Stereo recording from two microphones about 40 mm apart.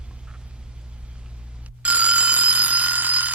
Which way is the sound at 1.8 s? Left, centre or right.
Right.